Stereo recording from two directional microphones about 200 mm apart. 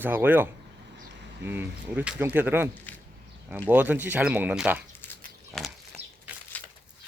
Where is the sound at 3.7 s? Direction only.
10° right (ahead or behind).